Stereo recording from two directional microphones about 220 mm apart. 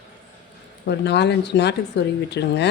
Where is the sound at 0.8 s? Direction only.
50° left (ahead or behind).